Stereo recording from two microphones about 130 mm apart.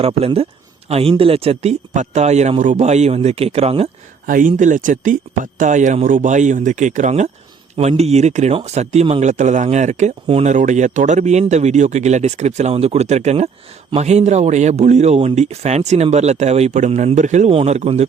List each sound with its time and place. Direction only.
0.0 s speech: 50° right (ahead or behind)
4.3 s speech: 85° right; by 7.3 s 65° right (ahead or behind)
7.8 s speech: 55° right (ahead or behind)
10.2 s speech: 50° right (ahead or behind)
10.5 s speech: 70° right (ahead or behind)
17.5 s speech: 55° right (ahead or behind)